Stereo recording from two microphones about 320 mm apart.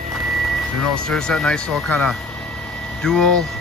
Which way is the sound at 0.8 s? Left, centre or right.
Centre.